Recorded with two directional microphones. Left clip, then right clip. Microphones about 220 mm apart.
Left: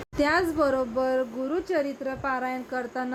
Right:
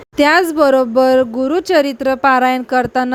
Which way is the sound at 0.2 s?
45° right (ahead or behind).